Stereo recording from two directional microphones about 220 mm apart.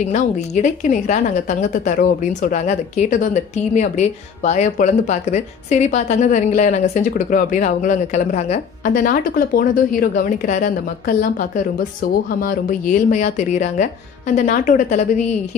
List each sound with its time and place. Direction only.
0.0 s a woman's voice: 35° left (ahead or behind)